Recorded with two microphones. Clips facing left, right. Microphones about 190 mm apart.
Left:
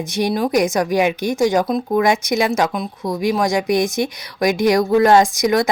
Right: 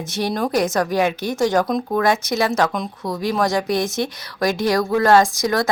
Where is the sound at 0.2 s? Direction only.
15° left (ahead or behind).